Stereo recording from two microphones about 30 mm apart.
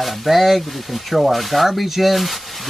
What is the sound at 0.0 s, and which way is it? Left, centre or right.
Speech, centre.